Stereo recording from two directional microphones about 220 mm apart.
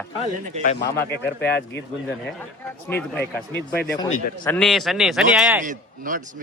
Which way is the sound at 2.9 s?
10° left (ahead or behind).